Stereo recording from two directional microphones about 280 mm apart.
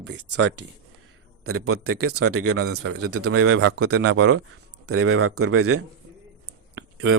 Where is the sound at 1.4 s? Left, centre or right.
Right.